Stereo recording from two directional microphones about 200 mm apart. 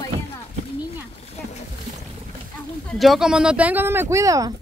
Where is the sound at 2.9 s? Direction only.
Centre (ahead or behind); by 4.5 s 15° right (ahead or behind).